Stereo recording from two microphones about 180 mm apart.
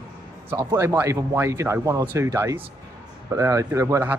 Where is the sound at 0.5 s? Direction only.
15° right (ahead or behind).